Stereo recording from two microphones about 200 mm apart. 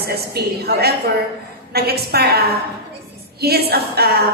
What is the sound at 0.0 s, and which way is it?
A woman's voice, 50° right (ahead or behind).